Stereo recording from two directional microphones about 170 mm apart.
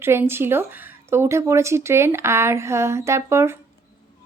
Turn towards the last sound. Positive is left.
turn(degrees=-15)  # may be behind; listen again after turning